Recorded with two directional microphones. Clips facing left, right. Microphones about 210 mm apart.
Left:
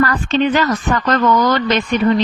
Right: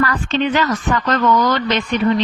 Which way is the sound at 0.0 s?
45° left (ahead or behind).